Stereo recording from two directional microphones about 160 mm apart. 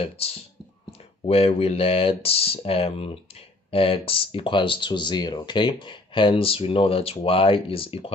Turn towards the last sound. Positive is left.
turn(degrees=35)  # may be behind; listen again after turning